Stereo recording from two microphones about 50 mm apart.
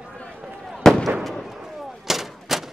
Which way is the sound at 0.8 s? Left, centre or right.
Centre.